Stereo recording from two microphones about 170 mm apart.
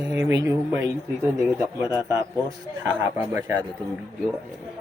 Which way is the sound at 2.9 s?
15° right (ahead or behind).